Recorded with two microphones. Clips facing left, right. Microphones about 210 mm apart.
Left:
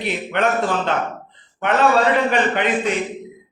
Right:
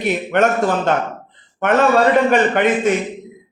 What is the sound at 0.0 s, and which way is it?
Speech, 45° right (ahead or behind).